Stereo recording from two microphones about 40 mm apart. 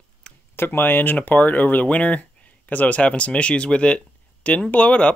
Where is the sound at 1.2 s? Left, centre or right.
Left.